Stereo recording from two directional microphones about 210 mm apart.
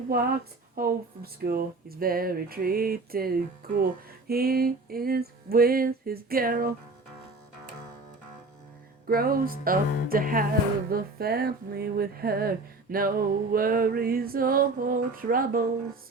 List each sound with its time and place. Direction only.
0.8 s speech: 45° right (ahead or behind)
9.0 s speech: 45° right (ahead or behind)